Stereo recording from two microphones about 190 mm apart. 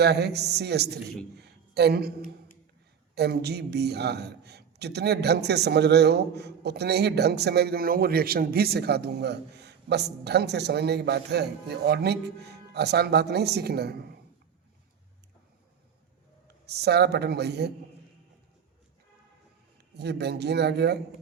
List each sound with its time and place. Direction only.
0.0 s a man's voice: 60° right (ahead or behind)
3.2 s a man's voice: 60° right (ahead or behind)
16.6 s a man's voice: 60° right (ahead or behind)
20.0 s a man's voice: 60° right (ahead or behind)